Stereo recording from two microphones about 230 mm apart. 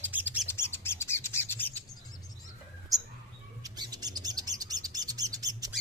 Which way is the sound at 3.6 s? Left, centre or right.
Centre.